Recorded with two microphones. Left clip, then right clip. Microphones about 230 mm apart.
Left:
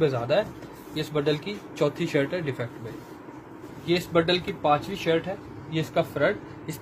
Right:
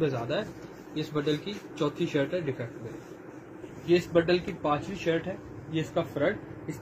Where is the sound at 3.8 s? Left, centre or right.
Left.